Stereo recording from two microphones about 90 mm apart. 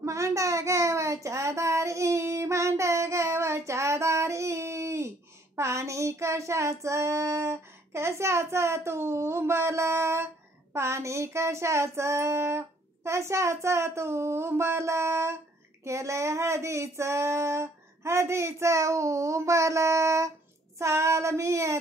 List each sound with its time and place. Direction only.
0.0 s a sound: 35° right (ahead or behind)
5.6 s child singing: 35° right (ahead or behind)
15.8 s female singing: 35° right (ahead or behind)